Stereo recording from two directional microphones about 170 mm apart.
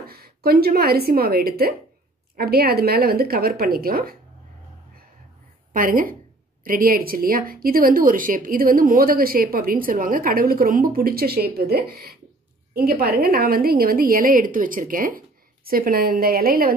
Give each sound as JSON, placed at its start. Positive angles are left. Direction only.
{"t": 0.0, "sound": "a woman's voice", "side_deg": -65}
{"t": 5.7, "sound": "a woman's voice", "side_deg": -55}